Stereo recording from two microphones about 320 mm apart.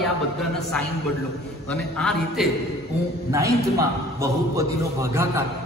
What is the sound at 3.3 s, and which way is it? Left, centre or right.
A man's voice, centre.